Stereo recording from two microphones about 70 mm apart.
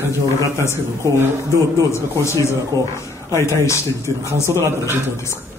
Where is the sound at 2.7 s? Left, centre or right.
Right.